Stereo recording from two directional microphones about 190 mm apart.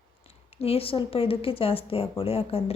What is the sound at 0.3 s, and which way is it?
A woman's voice, 30° left (ahead or behind).